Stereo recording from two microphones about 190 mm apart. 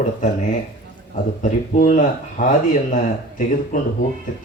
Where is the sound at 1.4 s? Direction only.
45° left (ahead or behind).